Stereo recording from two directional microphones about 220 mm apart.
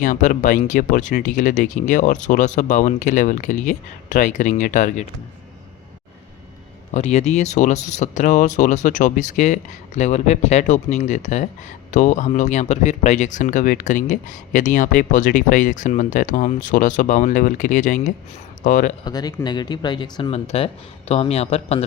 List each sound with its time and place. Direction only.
0.0 s speech: 35° left (ahead or behind)
6.9 s speech: 30° left (ahead or behind)
19.0 s speech: 15° left (ahead or behind)